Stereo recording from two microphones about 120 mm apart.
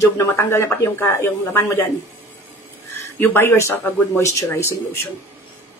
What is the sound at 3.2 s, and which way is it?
Speech, 20° left (ahead or behind).